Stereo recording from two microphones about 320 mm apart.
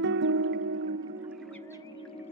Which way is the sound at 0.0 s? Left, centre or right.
Right.